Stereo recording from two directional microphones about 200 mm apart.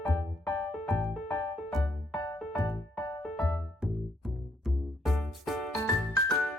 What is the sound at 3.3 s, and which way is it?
Music, 5° left (ahead or behind).